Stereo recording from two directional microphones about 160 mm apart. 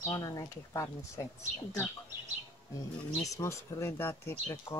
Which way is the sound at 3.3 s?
15° left (ahead or behind).